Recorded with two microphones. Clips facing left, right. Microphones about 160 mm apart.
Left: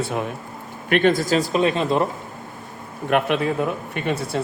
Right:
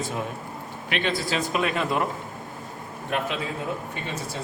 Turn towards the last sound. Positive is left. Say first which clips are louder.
# left 8 dB
turn(degrees=65)  # may be behind; listen again after turning